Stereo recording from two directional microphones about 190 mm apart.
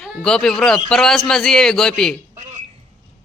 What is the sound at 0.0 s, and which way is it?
A man's voice, 5° left (ahead or behind).